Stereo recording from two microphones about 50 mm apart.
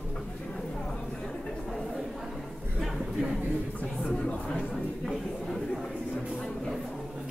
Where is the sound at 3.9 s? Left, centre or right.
Centre.